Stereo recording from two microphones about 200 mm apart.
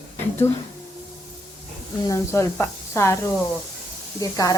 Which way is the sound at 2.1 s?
15° left (ahead or behind).